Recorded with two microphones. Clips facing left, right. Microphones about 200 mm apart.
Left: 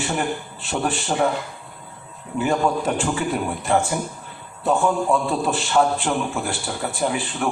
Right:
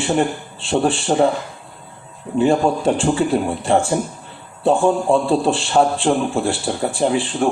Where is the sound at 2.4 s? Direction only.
30° right (ahead or behind).